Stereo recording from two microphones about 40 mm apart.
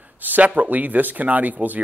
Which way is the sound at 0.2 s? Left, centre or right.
Right.